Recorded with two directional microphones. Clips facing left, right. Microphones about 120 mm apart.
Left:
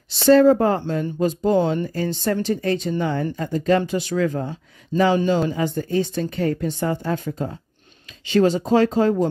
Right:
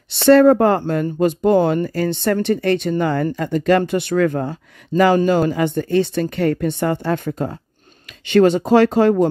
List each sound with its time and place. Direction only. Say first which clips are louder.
0.1 s speech: right 3 dB; 60° right (ahead or behind)